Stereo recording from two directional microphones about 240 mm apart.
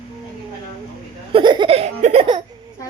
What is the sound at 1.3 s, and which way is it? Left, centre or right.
Laughter, centre.